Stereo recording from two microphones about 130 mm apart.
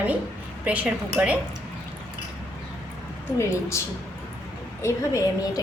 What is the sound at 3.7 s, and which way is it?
A woman's voice, 20° left (ahead or behind).